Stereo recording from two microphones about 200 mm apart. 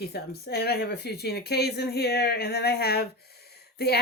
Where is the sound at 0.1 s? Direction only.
50° left (ahead or behind).